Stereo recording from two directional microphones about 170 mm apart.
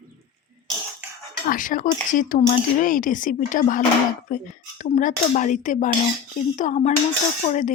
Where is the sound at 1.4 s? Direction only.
50° left (ahead or behind).